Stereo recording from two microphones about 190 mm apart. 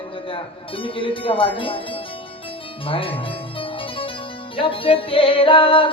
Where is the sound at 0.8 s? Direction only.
30° left (ahead or behind).